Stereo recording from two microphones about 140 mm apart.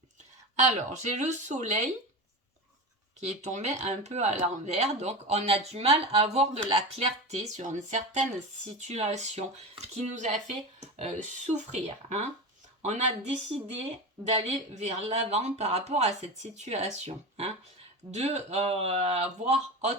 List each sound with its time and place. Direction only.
0.6 s speech: 55° right (ahead or behind)
3.2 s speech: 55° right (ahead or behind)